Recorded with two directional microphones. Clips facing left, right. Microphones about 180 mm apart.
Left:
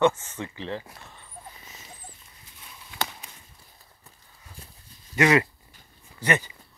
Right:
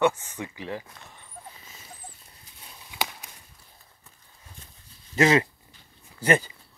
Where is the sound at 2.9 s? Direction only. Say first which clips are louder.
Even; 10° right (ahead or behind).